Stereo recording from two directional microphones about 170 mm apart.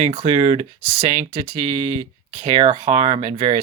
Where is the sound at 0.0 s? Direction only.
35° right (ahead or behind).